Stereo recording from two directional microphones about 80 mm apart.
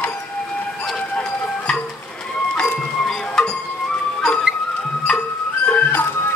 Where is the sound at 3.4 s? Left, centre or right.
Centre.